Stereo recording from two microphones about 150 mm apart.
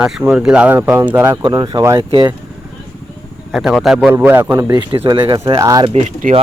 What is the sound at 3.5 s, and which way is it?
Speech, centre (ahead or behind).